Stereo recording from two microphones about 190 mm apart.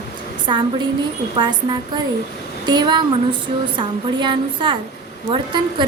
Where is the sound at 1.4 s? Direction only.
25° right (ahead or behind).